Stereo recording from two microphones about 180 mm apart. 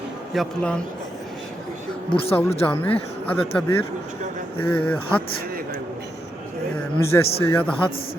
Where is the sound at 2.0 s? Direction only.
30° left (ahead or behind).